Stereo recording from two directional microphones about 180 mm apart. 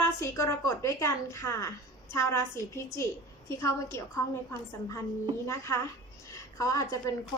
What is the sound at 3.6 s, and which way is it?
Speech, 15° left (ahead or behind).